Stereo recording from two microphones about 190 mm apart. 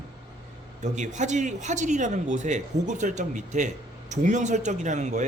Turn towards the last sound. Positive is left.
turn(degrees=-40)  # may be behind; listen again after turning